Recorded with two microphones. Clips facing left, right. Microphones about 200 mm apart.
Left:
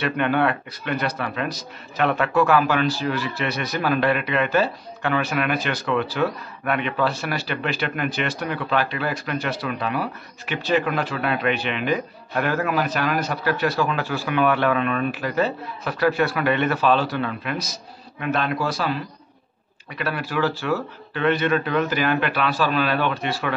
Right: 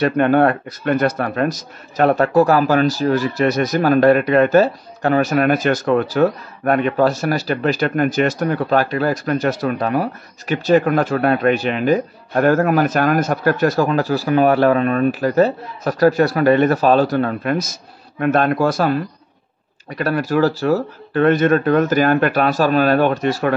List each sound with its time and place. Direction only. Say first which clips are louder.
0.0 s speech: right 7 dB; 45° right (ahead or behind)